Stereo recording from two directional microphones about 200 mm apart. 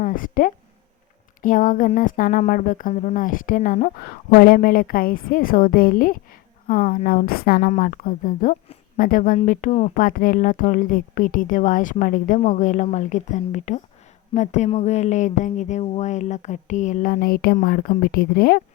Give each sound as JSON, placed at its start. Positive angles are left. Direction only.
{"t": 0.0, "sound": "speech", "side_deg": 45}